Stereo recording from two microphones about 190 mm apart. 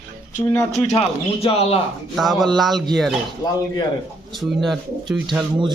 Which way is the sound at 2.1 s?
Centre (ahead or behind).